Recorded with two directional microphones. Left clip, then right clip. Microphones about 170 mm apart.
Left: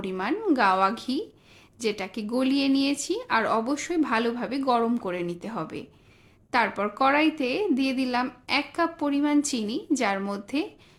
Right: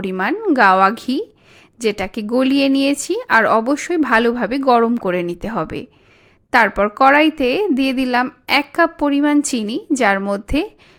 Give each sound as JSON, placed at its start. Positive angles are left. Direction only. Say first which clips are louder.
{"t": 0.0, "sound": "a woman's voice", "louder": "right 8 dB", "side_deg": -40}